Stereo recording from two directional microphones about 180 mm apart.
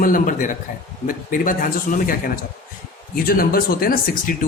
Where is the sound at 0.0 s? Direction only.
50° left (ahead or behind).